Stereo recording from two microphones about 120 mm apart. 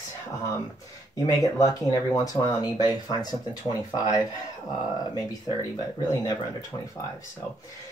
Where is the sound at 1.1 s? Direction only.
30° left (ahead or behind).